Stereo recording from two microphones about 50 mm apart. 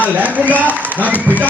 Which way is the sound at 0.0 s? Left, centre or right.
Right.